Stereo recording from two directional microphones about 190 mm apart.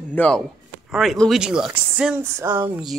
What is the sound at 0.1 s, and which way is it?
Speech, 5° left (ahead or behind).